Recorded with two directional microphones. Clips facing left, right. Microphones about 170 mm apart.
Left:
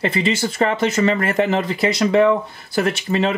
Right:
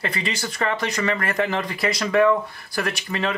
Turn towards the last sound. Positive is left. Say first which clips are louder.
# left 6 dB
turn(degrees=25)  # may be behind; listen again after turning